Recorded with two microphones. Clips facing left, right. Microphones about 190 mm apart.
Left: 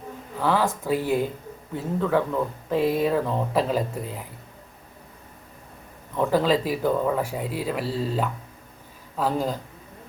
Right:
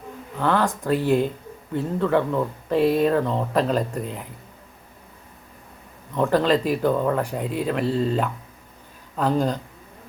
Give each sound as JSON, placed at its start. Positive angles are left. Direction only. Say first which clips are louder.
{"t": 0.3, "sound": "speech", "louder": "right 1 dB", "side_deg": 5}
{"t": 6.1, "sound": "speech", "louder": "right 2 dB", "side_deg": 5}